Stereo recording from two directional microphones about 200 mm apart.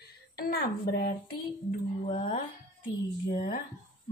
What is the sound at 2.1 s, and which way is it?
Speech, 45° left (ahead or behind).